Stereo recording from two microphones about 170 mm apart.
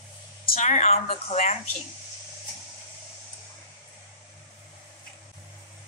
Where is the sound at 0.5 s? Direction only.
45° left (ahead or behind).